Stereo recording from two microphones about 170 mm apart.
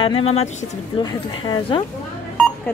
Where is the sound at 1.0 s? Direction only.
25° left (ahead or behind).